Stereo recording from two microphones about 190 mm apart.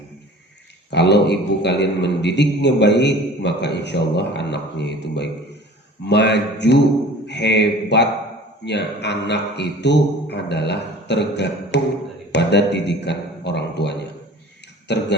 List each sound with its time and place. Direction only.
0.9 s a man's voice: 65° left (ahead or behind)